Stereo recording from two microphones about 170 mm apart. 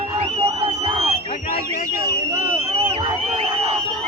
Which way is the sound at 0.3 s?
35° right (ahead or behind).